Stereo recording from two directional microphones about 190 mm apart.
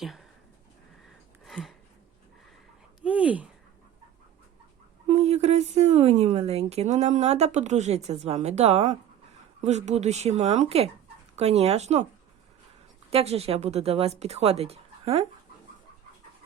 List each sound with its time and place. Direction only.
0.0 s speech: centre (ahead or behind)
1.5 s a sound: centre (ahead or behind)
3.0 s speech: 5° right (ahead or behind)
5.0 s speech: 35° right (ahead or behind)
13.1 s speech: 30° right (ahead or behind)